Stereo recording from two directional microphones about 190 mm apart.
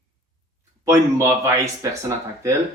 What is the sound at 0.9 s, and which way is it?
Speech, 15° right (ahead or behind).